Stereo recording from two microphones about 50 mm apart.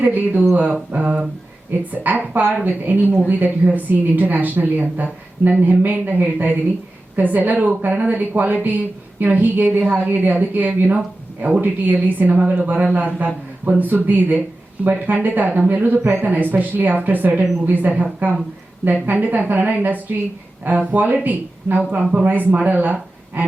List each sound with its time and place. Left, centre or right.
0.0 s a woman's voice: right
1.9 s a woman's voice: right